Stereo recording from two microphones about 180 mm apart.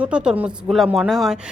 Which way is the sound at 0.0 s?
5° right (ahead or behind).